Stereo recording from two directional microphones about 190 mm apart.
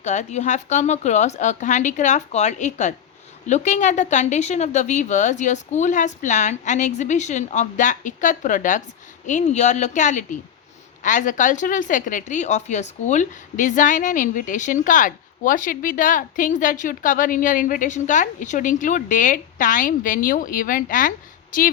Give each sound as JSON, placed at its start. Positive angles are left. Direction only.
{"t": 0.0, "sound": "a woman's voice", "side_deg": 40}